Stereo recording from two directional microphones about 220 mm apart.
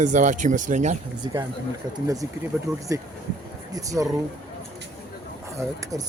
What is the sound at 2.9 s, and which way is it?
Speech, 15° right (ahead or behind).